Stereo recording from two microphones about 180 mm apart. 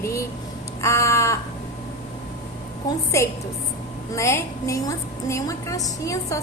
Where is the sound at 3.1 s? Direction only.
15° left (ahead or behind).